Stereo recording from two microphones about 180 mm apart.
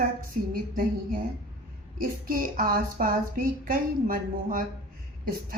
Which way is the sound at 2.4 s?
50° right (ahead or behind).